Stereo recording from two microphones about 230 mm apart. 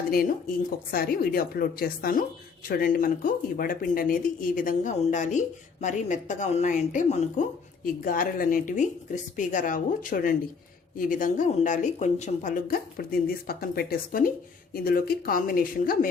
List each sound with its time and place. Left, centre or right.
0.1 s speech: left